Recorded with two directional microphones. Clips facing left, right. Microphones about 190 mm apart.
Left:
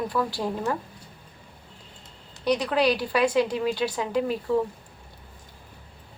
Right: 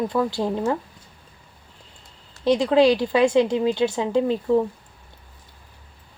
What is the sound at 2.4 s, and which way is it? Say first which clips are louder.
A woman's voice: right 6 dB; 25° right (ahead or behind).